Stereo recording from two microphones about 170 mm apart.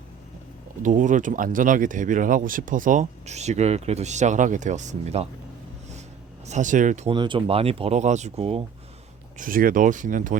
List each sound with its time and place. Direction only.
0.8 s speech: 50° right (ahead or behind)
6.5 s speech: 50° right (ahead or behind)
7.1 s speech: 30° right (ahead or behind)
9.4 s speech: 55° right (ahead or behind)